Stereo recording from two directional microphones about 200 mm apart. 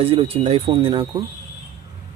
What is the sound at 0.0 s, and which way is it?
Speech, 30° right (ahead or behind).